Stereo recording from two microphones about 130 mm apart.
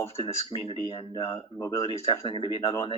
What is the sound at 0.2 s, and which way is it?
Speech, 40° left (ahead or behind).